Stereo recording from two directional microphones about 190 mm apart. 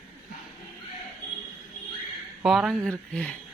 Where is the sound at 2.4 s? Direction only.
5° right (ahead or behind).